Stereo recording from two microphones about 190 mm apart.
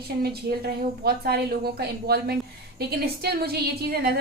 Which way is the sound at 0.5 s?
60° right (ahead or behind).